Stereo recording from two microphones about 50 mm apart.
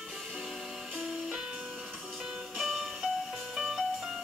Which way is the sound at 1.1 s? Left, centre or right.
Centre.